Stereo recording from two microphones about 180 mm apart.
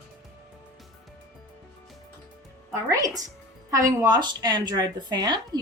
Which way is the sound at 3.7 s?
20° right (ahead or behind).